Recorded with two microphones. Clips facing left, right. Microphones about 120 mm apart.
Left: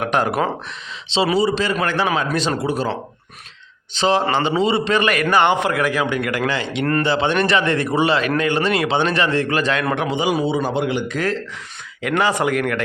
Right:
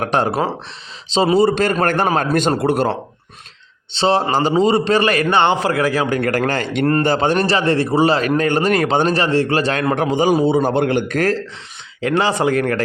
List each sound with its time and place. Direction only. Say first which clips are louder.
0.0 s a man's voice: right 1 dB; 30° right (ahead or behind)
1.4 s a man's voice: right 4 dB; 55° right (ahead or behind)
3.9 s a man's voice: right 2 dB; 35° right (ahead or behind); by 11.3 s 50° right (ahead or behind)
12.0 s a man's voice: right 2 dB; 30° right (ahead or behind)